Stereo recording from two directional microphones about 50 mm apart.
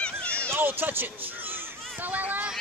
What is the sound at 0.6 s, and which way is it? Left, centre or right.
Speech, right.